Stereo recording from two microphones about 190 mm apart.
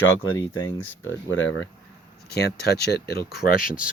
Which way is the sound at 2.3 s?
55° left (ahead or behind).